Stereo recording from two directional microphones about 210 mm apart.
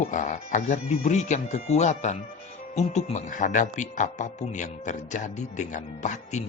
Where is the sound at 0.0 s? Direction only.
35° left (ahead or behind).